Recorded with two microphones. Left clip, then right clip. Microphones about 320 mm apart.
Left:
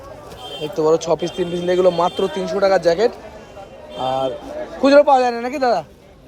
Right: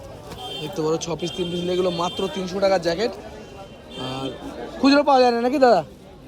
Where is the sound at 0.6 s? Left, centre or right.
Centre.